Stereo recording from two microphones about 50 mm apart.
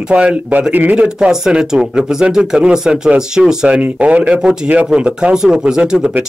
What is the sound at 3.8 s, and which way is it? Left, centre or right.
Speech, right.